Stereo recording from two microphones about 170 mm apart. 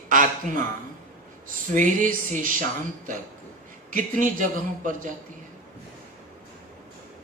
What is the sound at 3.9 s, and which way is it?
A man's voice, 50° right (ahead or behind).